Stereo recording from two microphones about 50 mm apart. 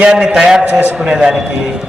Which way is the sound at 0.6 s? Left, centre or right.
Right.